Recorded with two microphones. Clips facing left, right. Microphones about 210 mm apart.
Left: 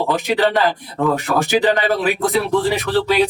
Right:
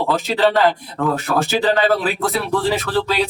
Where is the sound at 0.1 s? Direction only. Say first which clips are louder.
Right 1 dB; 15° left (ahead or behind).